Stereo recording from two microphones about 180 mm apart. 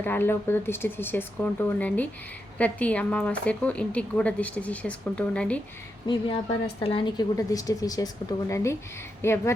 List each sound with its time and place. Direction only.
0.0 s a woman's voice: 10° left (ahead or behind)
6.1 s a woman's voice: 30° left (ahead or behind)